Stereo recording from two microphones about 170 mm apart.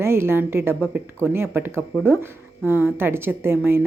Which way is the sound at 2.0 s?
15° right (ahead or behind).